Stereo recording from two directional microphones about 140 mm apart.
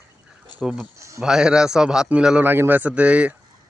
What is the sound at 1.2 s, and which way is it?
A man's voice, 5° right (ahead or behind).